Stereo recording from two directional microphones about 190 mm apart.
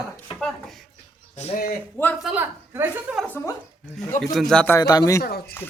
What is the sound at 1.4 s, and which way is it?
Speech, 40° left (ahead or behind).